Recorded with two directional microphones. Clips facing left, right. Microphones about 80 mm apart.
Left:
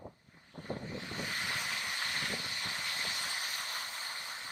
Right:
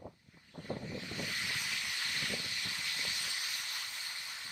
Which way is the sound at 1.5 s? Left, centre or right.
Left.